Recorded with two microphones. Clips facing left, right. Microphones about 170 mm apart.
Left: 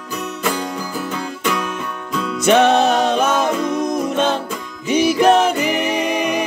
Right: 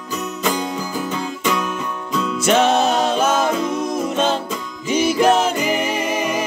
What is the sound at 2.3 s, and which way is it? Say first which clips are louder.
Music: left 3 dB; 60° left (ahead or behind).